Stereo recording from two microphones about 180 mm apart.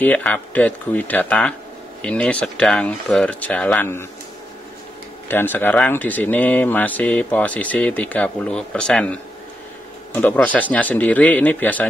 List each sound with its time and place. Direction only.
0.0 s speech: 10° left (ahead or behind)
5.3 s speech: 10° left (ahead or behind)